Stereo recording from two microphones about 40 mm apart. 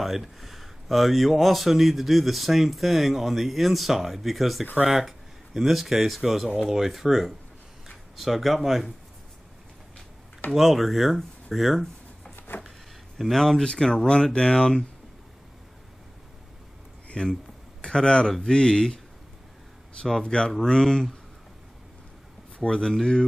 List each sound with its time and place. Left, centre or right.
0.0 s speech: centre
10.5 s speech: centre
13.3 s speech: centre
17.1 s speech: left
20.1 s speech: centre
22.6 s speech: centre